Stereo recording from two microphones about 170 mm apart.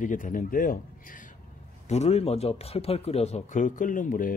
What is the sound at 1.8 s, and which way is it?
Speech, 40° left (ahead or behind).